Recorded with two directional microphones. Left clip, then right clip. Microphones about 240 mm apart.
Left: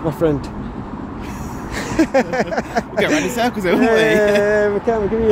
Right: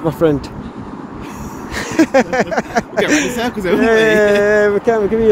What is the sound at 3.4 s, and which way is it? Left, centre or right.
Speech, centre.